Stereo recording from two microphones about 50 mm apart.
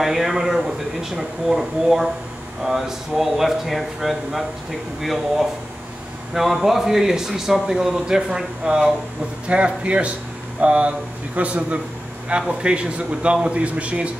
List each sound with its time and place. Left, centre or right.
0.0 s speech: centre
6.3 s a man's voice: centre; by 14.1 s right